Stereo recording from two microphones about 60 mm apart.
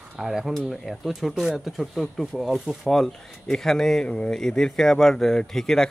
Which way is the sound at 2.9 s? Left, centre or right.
Centre.